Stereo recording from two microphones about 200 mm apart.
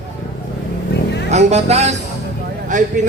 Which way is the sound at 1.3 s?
35° right (ahead or behind).